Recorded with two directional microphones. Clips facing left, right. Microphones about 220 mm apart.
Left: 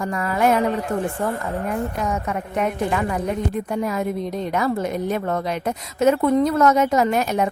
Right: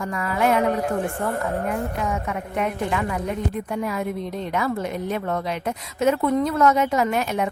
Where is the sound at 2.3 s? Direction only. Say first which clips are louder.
Left 2 dB; 40° left (ahead or behind).